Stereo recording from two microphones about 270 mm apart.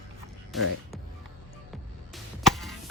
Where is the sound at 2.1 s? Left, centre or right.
Centre.